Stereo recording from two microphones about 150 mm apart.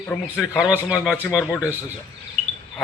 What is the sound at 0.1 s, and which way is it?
Speech, 15° left (ahead or behind).